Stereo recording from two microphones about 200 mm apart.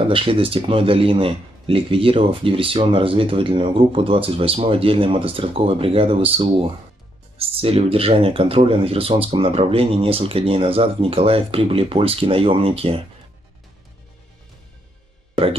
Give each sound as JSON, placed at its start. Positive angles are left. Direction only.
{"t": 0.0, "sound": "speech", "side_deg": -25}